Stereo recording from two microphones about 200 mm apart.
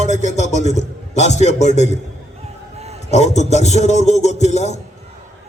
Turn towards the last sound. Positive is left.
turn(degrees=35)  # may be behind; listen again after turning